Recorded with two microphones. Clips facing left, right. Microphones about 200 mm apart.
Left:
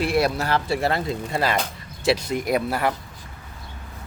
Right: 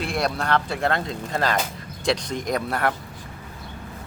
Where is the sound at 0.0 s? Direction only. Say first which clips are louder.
Left 4 dB; 5° left (ahead or behind).